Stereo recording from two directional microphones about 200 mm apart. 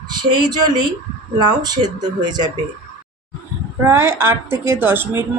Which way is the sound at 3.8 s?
10° right (ahead or behind).